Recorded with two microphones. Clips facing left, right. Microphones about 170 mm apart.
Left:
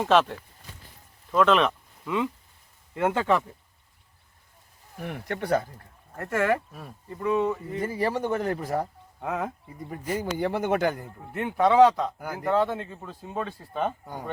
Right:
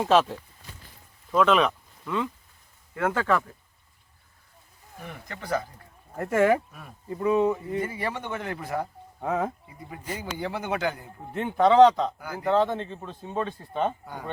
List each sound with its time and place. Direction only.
0.1 s speech: 5° right (ahead or behind)
2.9 s speech: 20° left (ahead or behind)
4.9 s speech: 65° left (ahead or behind)
6.1 s speech: 5° right (ahead or behind)
7.8 s speech: 40° left (ahead or behind)
9.2 s speech: centre (ahead or behind)
10.3 s speech: 50° left (ahead or behind)
11.3 s speech: 5° left (ahead or behind)